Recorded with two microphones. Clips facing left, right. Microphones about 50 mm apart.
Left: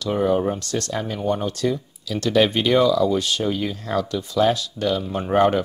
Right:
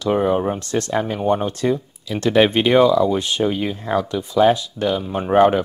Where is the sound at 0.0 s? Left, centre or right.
Right.